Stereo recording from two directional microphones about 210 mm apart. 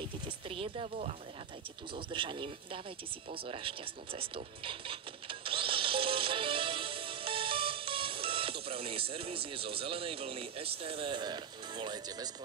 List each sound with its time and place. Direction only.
0.5 s speech: 25° right (ahead or behind)
4.2 s music: 25° right (ahead or behind)